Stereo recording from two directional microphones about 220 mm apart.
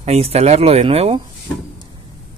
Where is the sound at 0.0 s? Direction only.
30° right (ahead or behind).